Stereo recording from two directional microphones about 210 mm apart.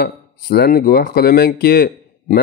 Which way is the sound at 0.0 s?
45° left (ahead or behind).